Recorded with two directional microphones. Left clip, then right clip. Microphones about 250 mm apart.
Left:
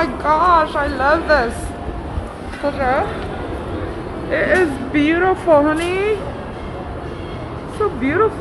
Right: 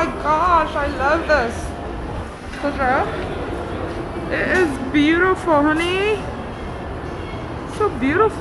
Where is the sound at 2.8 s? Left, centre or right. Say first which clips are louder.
Even; centre.